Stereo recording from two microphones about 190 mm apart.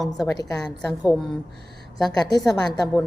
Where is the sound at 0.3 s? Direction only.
20° left (ahead or behind).